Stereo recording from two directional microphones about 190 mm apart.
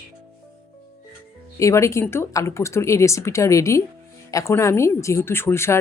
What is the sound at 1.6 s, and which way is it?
Speech, 15° left (ahead or behind).